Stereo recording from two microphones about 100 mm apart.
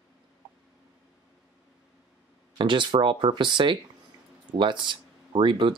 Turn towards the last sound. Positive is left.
turn(degrees=-55)  # may be behind; listen again after turning